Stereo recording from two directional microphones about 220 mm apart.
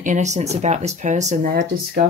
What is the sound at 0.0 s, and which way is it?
Speech, 35° right (ahead or behind).